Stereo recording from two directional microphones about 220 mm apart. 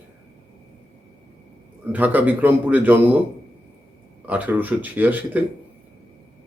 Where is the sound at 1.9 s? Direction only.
10° right (ahead or behind).